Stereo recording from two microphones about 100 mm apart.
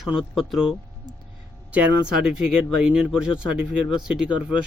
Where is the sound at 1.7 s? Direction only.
10° right (ahead or behind).